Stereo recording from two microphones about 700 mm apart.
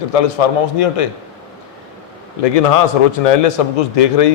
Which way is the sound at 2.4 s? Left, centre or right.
Left.